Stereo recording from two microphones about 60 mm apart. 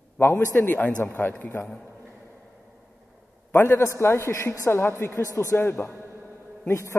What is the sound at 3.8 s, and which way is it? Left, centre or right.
A man's voice, left.